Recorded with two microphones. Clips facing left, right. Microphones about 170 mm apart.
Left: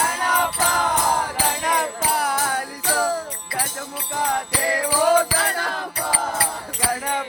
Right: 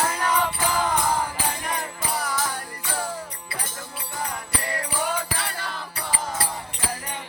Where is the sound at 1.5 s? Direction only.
85° left; by 2.5 s 55° left (ahead or behind).